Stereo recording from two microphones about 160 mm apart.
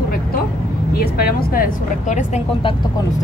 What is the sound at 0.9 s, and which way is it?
Speech, 70° left (ahead or behind).